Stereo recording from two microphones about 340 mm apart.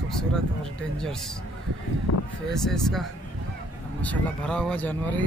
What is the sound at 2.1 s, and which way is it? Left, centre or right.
Speech, left.